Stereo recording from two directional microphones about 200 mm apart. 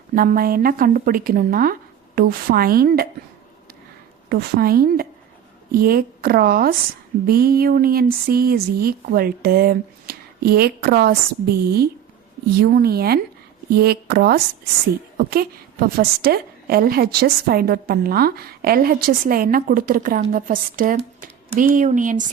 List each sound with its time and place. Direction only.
0.1 s a woman's voice: 45° right (ahead or behind)
4.3 s a woman's voice: 50° right (ahead or behind)